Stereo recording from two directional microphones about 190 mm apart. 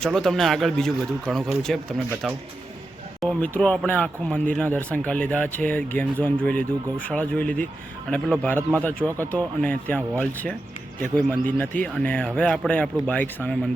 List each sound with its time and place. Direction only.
0.0 s a man's voice: centre (ahead or behind)